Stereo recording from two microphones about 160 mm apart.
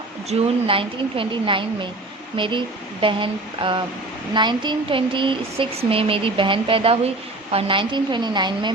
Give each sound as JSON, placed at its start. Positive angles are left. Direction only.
{"t": 0.3, "sound": "a woman's voice", "side_deg": -40}